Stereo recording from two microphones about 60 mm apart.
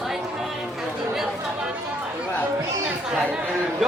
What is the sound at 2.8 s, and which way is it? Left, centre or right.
Chatter, centre.